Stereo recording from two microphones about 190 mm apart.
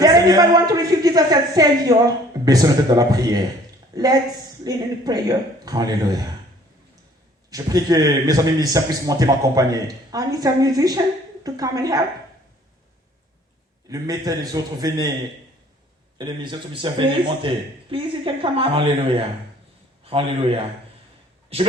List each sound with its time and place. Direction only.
0.0 s a woman's voice: 20° right (ahead or behind)
7.5 s a man's voice: 20° right (ahead or behind)
13.9 s a man's voice: 20° right (ahead or behind)
16.1 s a man's voice: 25° right (ahead or behind)